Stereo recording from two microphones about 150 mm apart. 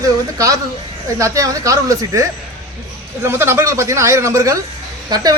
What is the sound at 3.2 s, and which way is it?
A woman's voice, 15° right (ahead or behind).